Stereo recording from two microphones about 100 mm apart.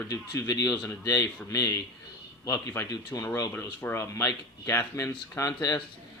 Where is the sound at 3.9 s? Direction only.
30° left (ahead or behind).